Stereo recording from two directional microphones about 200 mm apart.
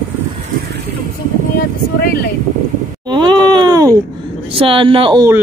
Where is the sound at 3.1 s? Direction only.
20° right (ahead or behind).